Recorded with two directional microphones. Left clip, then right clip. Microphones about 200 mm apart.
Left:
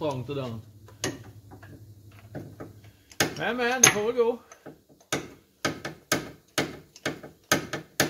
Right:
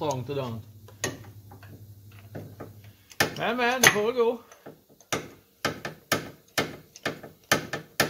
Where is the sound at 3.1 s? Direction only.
5° right (ahead or behind).